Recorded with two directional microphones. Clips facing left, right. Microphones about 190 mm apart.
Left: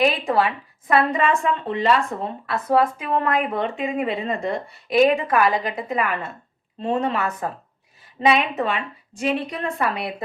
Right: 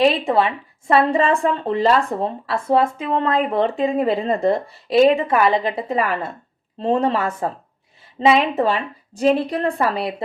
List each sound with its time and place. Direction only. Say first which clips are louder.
0.0 s a woman's voice: right 3 dB; 25° right (ahead or behind)